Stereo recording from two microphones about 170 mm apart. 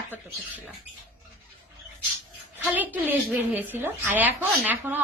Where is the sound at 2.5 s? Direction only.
10° right (ahead or behind).